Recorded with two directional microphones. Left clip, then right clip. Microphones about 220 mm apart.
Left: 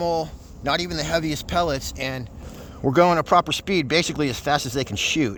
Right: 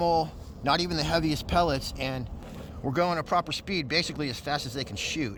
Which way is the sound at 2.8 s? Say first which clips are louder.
Left 10 dB; 40° left (ahead or behind).